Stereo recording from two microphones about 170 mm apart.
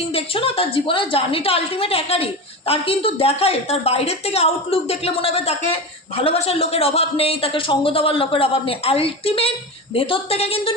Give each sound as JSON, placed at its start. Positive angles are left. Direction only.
{"t": 0.1, "sound": "a woman's voice", "side_deg": 35}